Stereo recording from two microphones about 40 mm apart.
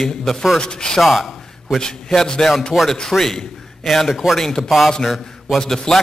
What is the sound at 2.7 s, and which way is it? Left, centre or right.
Speech, centre.